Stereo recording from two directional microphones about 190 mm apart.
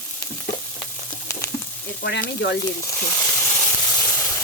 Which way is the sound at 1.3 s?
15° left (ahead or behind).